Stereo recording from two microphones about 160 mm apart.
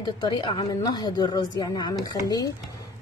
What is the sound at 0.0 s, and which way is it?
Speech, 25° left (ahead or behind).